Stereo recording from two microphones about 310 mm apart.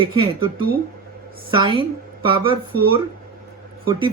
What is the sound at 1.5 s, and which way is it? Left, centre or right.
Speech, centre.